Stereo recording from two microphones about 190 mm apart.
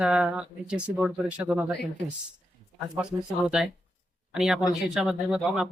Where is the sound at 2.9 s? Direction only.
5° right (ahead or behind).